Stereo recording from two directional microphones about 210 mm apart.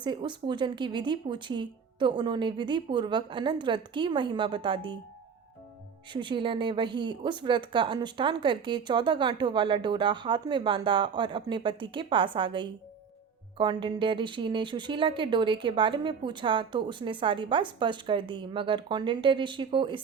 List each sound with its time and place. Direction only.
0.0 s speech: 20° right (ahead or behind)
6.1 s speech: 25° right (ahead or behind)